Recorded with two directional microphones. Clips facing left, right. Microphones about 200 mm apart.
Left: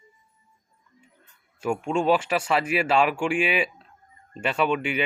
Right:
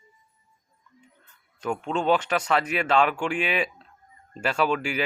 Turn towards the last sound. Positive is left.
turn(degrees=0)  # may be behind; listen again after turning